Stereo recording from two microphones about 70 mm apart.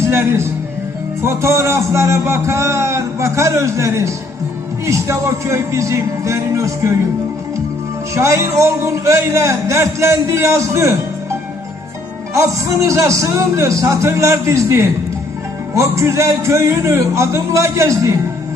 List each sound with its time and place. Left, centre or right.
0.1 s a man's voice: right
8.1 s a man's voice: right
12.3 s a man's voice: right